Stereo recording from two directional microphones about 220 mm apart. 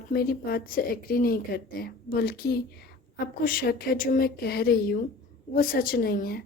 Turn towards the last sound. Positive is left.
turn(degrees=40)  # may be behind; listen again after turning